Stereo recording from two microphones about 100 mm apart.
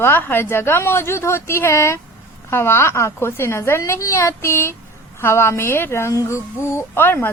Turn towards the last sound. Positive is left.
turn(degrees=20)  # may be behind; listen again after turning